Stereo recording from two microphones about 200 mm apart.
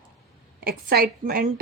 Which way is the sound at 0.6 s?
50° right (ahead or behind).